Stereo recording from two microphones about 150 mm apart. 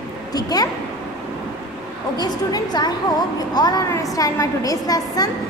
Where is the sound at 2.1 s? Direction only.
25° left (ahead or behind).